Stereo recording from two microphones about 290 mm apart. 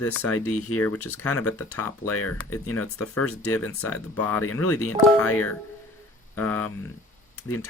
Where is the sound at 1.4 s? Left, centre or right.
Left.